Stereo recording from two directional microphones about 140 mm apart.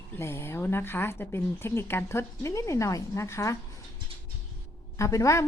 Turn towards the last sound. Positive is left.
turn(degrees=20)  # may be behind; listen again after turning